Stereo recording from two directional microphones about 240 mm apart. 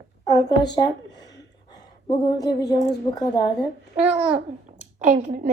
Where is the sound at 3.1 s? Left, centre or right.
Centre.